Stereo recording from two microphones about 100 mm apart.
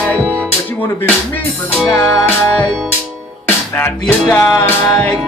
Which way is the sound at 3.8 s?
15° left (ahead or behind).